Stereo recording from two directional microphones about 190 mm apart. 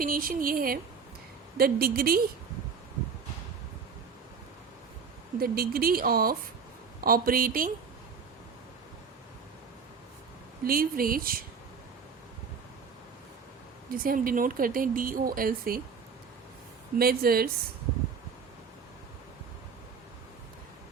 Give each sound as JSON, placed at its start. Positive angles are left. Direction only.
{"t": 0.0, "sound": "speech", "side_deg": -50}
{"t": 5.4, "sound": "speech", "side_deg": -50}
{"t": 10.7, "sound": "speech", "side_deg": -50}
{"t": 13.9, "sound": "speech", "side_deg": -50}
{"t": 17.0, "sound": "speech", "side_deg": -50}